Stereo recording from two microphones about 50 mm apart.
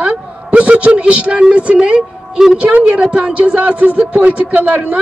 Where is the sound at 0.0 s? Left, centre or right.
Right.